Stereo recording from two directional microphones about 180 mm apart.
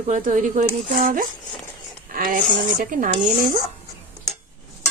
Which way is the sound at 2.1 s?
50° right (ahead or behind).